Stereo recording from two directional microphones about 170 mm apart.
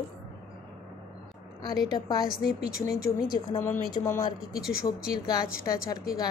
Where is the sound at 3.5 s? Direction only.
35° left (ahead or behind).